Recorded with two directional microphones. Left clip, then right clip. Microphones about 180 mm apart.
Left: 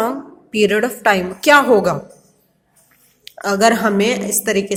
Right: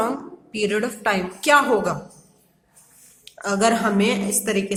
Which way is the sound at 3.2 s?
30° left (ahead or behind).